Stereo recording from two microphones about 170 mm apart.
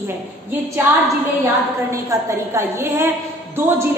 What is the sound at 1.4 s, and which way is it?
A woman's voice, 15° right (ahead or behind).